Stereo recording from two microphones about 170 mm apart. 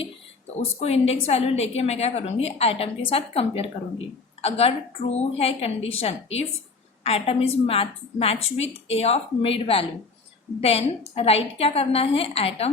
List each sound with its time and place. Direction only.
0.0 s a woman's voice: 35° left (ahead or behind)